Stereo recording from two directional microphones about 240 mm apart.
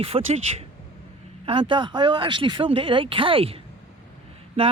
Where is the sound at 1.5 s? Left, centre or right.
Right.